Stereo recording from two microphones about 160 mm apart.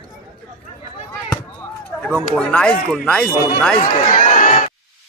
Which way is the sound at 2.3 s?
5° left (ahead or behind).